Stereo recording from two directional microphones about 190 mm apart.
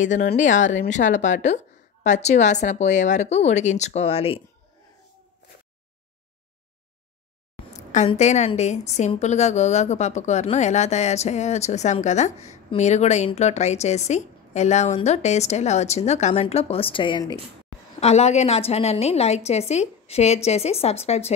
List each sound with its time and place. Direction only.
0.0 s a woman's voice: 40° left (ahead or behind)
5.4 s a sound: 60° left (ahead or behind)
7.9 s a woman's voice: 35° left (ahead or behind)
18.0 s a woman's voice: 35° left (ahead or behind)